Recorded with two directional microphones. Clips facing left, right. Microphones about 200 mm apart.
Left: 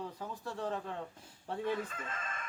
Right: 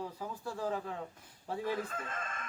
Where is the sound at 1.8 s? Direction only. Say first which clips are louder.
Right 3 dB; 50° right (ahead or behind).